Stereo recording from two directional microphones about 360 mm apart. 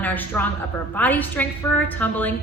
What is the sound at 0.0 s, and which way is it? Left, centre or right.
A woman's voice, centre.